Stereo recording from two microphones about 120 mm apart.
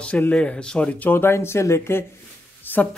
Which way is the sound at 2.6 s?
15° left (ahead or behind).